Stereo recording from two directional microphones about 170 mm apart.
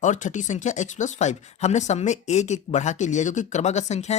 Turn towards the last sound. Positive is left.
turn(degrees=40)  # may be behind; listen again after turning